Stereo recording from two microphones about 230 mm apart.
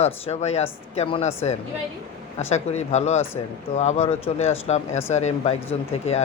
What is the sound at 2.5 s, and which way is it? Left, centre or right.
Speech, left.